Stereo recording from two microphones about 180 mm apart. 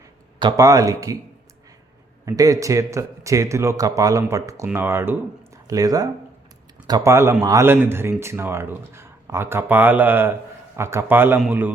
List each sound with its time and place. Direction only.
0.3 s speech: 20° right (ahead or behind)
2.2 s speech: 20° right (ahead or behind)